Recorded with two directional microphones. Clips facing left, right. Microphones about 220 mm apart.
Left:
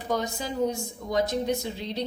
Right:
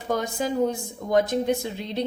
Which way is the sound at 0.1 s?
50° right (ahead or behind).